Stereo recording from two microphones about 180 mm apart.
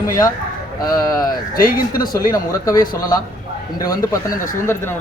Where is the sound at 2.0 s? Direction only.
20° left (ahead or behind).